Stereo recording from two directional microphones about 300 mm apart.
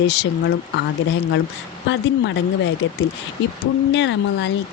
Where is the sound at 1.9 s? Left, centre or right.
Left.